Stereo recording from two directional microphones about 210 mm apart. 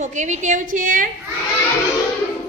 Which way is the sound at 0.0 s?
35° right (ahead or behind).